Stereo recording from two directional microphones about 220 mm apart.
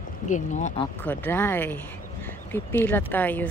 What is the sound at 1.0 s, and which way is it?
Speech, 10° left (ahead or behind).